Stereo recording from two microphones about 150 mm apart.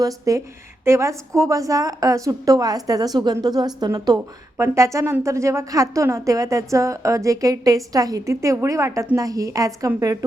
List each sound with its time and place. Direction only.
0.0 s a woman's voice: 20° right (ahead or behind)